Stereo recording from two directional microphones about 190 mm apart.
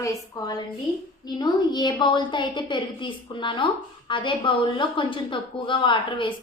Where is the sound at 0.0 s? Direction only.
20° left (ahead or behind).